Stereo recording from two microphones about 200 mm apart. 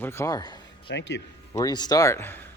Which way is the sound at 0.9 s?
60° left (ahead or behind).